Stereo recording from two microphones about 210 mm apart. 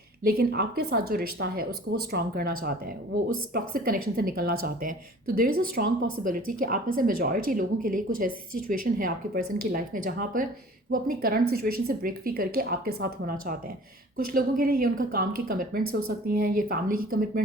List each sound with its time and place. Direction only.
0.3 s speech: 50° right (ahead or behind)
3.5 s speech: 45° right (ahead or behind)
6.0 s speech: 80° right
6.2 s speech: 45° right (ahead or behind)
15.8 s speech: 90° right
16.0 s speech: 45° right (ahead or behind)